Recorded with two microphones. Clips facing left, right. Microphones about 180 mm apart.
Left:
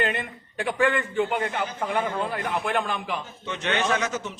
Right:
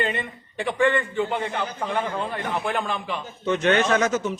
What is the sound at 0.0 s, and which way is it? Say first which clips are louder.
A man's voice: even; centre (ahead or behind).